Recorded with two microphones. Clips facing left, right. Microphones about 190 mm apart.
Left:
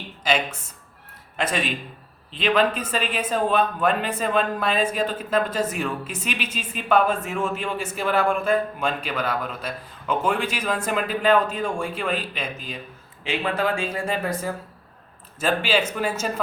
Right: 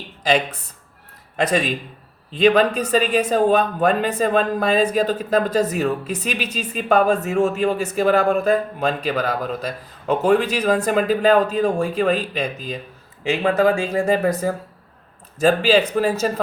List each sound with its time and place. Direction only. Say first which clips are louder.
1.4 s a man's voice: right 6 dB; 40° right (ahead or behind)
15.4 s speech: right 7 dB; 40° right (ahead or behind)